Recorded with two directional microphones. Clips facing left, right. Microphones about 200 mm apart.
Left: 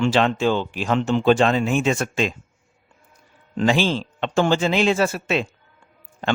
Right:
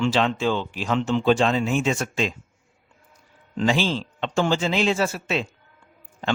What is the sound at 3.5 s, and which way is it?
Speech, 55° left (ahead or behind).